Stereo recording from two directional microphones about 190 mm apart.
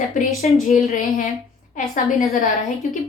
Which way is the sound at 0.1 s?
40° left (ahead or behind).